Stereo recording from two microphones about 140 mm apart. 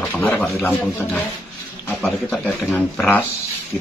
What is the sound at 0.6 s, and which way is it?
Speech, 15° left (ahead or behind).